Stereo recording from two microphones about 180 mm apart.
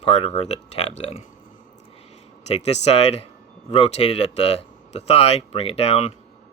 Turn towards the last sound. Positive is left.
turn(degrees=35)  # may be behind; listen again after turning